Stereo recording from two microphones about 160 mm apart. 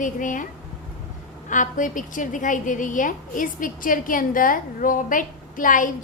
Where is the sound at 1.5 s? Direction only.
55° left (ahead or behind).